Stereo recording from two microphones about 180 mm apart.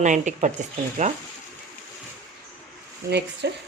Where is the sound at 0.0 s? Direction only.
45° right (ahead or behind).